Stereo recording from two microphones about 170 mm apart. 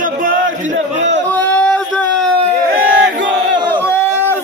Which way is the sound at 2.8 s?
75° right (ahead or behind).